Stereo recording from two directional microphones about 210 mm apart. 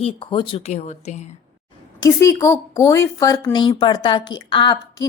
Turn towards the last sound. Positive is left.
turn(degrees=20)  # may be behind; listen again after turning